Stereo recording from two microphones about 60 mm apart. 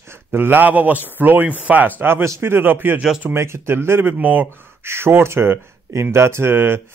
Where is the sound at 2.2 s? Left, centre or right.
Right.